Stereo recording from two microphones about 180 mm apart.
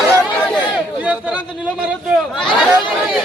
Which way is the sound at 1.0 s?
5° right (ahead or behind).